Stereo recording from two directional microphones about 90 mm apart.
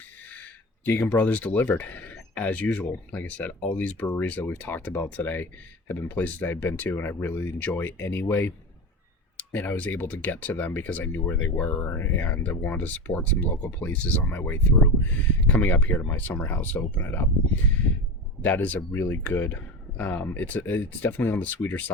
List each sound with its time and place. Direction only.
0.3 s speech: 15° left (ahead or behind)